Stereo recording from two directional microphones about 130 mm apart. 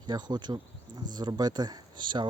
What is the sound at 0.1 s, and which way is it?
Speech, 35° right (ahead or behind).